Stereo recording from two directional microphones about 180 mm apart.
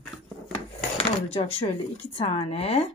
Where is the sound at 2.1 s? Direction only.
35° left (ahead or behind).